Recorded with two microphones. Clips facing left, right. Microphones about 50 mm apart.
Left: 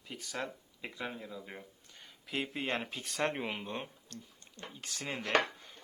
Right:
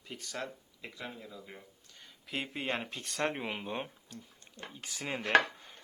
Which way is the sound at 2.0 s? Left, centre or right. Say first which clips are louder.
Left 1 dB; centre.